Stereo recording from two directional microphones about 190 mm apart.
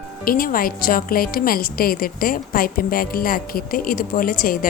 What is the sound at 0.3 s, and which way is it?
A woman's voice, 50° left (ahead or behind).